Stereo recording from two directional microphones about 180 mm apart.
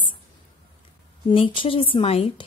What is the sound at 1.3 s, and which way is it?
A woman's voice, 25° left (ahead or behind).